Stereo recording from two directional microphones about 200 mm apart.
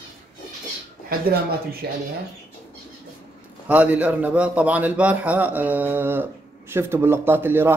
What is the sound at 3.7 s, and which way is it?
A man's voice, 10° right (ahead or behind).